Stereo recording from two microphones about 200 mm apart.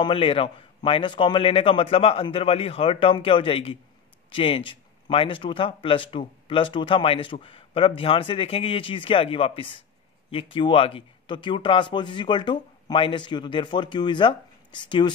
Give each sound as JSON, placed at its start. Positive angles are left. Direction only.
{"t": 0.0, "sound": "a man's voice", "side_deg": 25}